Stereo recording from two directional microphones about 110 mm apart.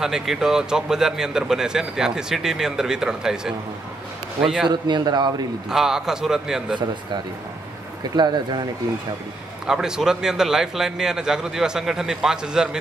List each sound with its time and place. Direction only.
0.0 s a man's voice: 5° right (ahead or behind)
4.6 s a man's voice: 45° right (ahead or behind)
5.7 s a man's voice: 5° right (ahead or behind)
8.2 s a man's voice: 40° right (ahead or behind)
9.7 s a man's voice: 5° right (ahead or behind)